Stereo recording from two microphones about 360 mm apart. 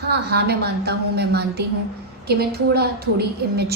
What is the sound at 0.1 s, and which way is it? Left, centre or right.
A woman's voice, right.